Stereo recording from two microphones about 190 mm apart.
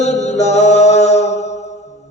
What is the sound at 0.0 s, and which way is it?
Music, 35° left (ahead or behind).